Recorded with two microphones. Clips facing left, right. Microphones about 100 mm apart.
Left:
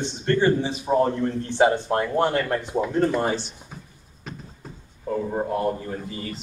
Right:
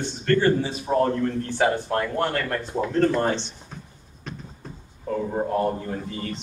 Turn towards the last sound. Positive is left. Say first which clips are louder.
# right 1 dB
turn(degrees=5)  # may be behind; listen again after turning